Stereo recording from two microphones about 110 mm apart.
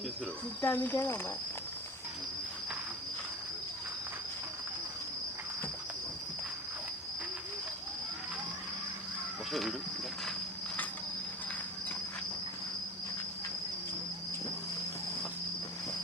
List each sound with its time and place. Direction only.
0.6 s speech: 20° left (ahead or behind)
9.5 s speech: centre (ahead or behind)